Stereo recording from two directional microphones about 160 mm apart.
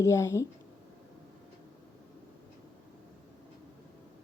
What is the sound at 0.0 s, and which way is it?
Speech, 20° left (ahead or behind).